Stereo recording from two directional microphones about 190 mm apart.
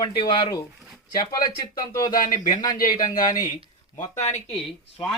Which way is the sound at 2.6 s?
20° left (ahead or behind).